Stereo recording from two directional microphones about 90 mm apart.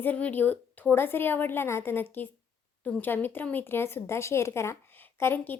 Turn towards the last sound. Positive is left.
turn(degrees=25)  # may be behind; listen again after turning